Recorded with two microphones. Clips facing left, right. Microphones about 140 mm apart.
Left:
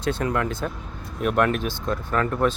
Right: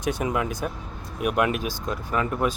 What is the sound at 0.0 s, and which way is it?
Speech, 15° right (ahead or behind).